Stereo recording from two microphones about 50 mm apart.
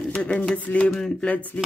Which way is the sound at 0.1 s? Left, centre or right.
Left.